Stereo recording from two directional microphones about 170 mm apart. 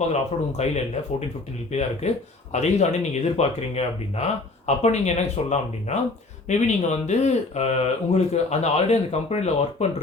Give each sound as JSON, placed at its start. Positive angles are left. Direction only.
{"t": 0.1, "sound": "speech", "side_deg": 40}
{"t": 2.0, "sound": "speech", "side_deg": 40}